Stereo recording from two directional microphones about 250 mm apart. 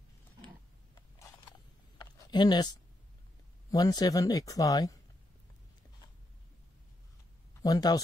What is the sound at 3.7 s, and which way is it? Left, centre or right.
Speech, centre.